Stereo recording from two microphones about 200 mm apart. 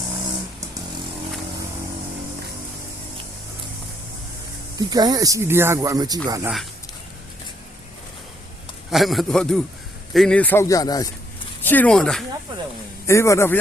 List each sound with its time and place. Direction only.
4.8 s speech: 20° right (ahead or behind)
8.9 s a man's voice: centre (ahead or behind)
13.1 s a man's voice: 15° left (ahead or behind)